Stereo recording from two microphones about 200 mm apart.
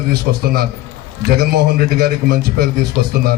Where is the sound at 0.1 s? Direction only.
50° right (ahead or behind).